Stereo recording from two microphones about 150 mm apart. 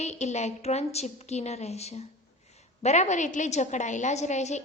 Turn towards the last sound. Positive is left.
turn(degrees=50)  # may be behind; listen again after turning